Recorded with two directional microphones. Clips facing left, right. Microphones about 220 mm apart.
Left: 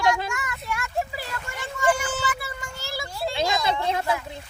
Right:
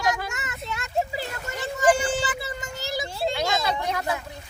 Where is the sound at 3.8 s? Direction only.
25° left (ahead or behind).